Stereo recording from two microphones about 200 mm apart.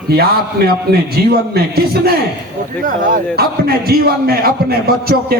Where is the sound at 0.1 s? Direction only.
50° right (ahead or behind).